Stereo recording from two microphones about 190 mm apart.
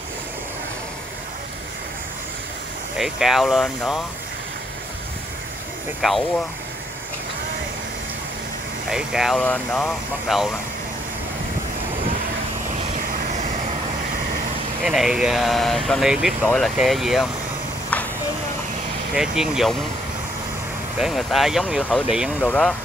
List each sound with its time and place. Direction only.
3.0 s speech: centre (ahead or behind)
5.9 s speech: centre (ahead or behind)
8.8 s speech: 5° right (ahead or behind)
12.7 s vehicle: 45° right (ahead or behind)
14.8 s speech: centre (ahead or behind)
19.1 s speech: 5° right (ahead or behind)
21.0 s speech: centre (ahead or behind)